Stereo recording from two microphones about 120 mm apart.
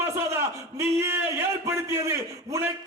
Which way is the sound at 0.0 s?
20° right (ahead or behind).